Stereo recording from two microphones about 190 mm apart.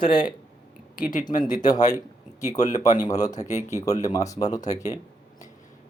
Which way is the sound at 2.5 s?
40° left (ahead or behind).